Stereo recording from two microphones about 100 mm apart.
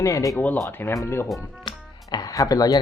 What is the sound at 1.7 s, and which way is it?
Music, 45° left (ahead or behind).